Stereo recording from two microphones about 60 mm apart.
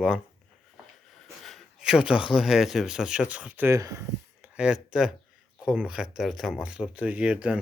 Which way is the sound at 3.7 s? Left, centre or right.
Right.